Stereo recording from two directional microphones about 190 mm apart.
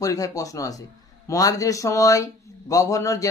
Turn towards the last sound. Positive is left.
turn(degrees=15)  # may be behind; listen again after turning